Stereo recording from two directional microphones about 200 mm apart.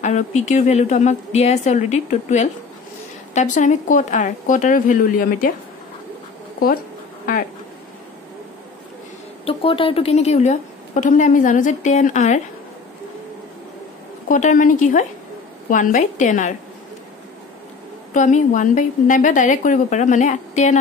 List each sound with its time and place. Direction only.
0.0 s a woman's voice: 35° left (ahead or behind)
9.4 s a woman's voice: 30° left (ahead or behind)
14.3 s a woman's voice: 40° left (ahead or behind)
18.1 s a woman's voice: 40° left (ahead or behind)